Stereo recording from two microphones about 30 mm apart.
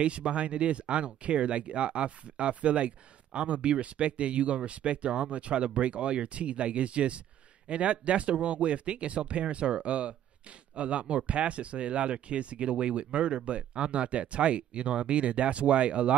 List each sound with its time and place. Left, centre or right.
0.0 s speech: right